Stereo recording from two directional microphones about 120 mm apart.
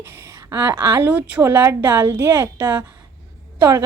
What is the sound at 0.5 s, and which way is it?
A woman's voice, 20° right (ahead or behind).